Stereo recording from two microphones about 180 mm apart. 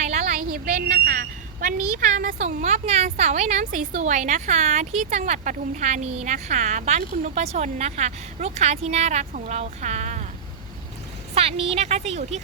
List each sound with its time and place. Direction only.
0.0 s a woman's voice: 40° right (ahead or behind)
11.3 s a woman's voice: 35° right (ahead or behind)